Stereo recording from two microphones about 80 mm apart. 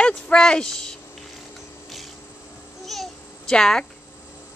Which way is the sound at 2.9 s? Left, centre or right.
Centre.